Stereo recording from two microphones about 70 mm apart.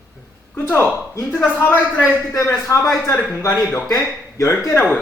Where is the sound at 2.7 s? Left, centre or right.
Left.